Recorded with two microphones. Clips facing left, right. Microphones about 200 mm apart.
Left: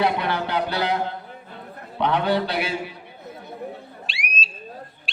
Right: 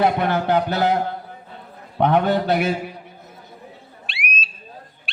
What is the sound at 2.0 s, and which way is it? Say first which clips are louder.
Speech: right 4 dB; 45° right (ahead or behind).